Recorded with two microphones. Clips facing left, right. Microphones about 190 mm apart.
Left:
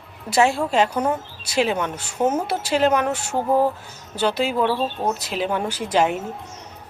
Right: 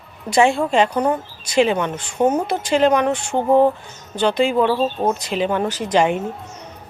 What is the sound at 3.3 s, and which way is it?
Speech, 25° right (ahead or behind).